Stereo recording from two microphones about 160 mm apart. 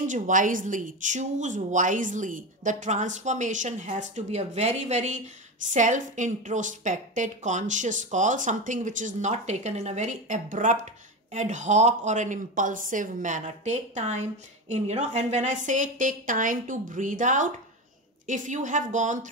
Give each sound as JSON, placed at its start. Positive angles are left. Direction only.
{"t": 0.0, "sound": "a woman's voice", "side_deg": -55}